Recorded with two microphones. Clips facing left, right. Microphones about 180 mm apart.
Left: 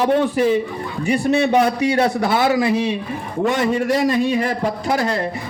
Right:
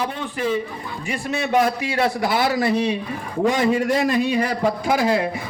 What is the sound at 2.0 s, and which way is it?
Speech, 25° left (ahead or behind).